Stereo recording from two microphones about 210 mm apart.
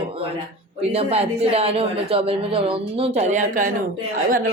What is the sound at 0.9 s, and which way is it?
Speech, 30° right (ahead or behind).